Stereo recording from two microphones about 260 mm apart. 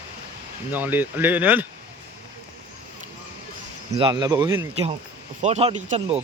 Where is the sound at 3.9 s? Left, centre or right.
Centre.